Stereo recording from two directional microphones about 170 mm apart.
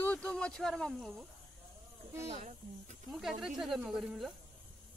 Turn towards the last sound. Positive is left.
turn(degrees=0)  # may be behind; listen again after turning